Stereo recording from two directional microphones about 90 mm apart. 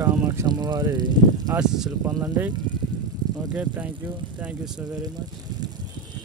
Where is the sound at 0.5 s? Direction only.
50° right (ahead or behind).